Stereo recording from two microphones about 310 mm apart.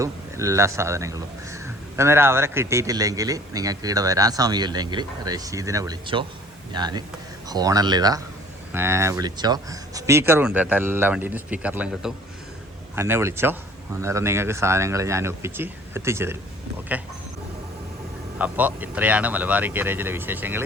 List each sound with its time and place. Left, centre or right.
0.0 s a man's voice: centre
18.3 s speech: centre